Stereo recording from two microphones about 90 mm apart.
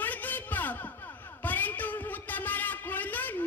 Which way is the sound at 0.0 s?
20° left (ahead or behind).